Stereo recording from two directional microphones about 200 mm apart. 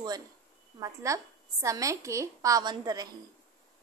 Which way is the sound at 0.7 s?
15° right (ahead or behind).